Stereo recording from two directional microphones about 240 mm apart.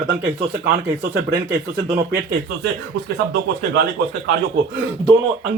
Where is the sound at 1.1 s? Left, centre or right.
Right.